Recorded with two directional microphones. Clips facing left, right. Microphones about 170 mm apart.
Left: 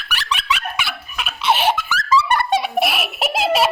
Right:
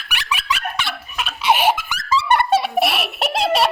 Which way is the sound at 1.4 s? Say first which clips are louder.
Right 1 dB; 10° right (ahead or behind).